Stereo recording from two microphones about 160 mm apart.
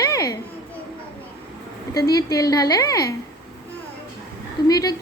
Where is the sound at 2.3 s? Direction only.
20° left (ahead or behind).